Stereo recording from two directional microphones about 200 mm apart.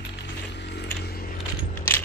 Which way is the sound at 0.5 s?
55° left (ahead or behind).